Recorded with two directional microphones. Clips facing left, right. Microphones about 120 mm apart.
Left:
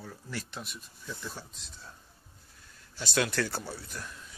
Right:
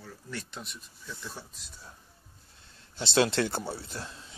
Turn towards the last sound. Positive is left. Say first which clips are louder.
# right 2 dB
turn(degrees=-30)  # may be behind; listen again after turning